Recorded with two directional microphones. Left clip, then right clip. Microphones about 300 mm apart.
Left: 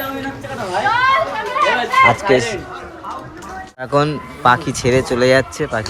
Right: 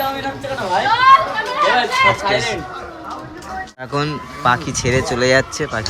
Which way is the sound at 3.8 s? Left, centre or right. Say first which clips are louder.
Left 7 dB; centre.